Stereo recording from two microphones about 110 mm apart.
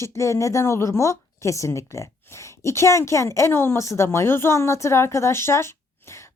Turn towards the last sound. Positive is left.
turn(degrees=25)  # may be behind; listen again after turning